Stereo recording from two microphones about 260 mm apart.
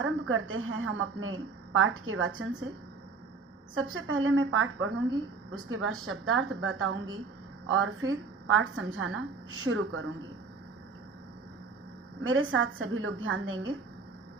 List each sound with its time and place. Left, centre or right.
0.0 s a woman's voice: right
3.8 s a woman's voice: right
12.2 s a woman's voice: right